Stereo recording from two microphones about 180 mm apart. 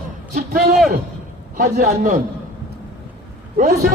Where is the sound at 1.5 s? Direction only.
50° right (ahead or behind).